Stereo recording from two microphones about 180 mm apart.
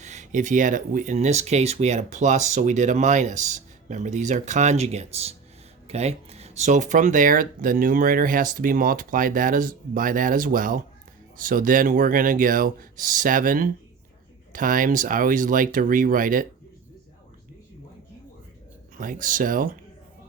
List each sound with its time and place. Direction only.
0.0 s speech: 40° right (ahead or behind)
18.9 s speech: 50° right (ahead or behind)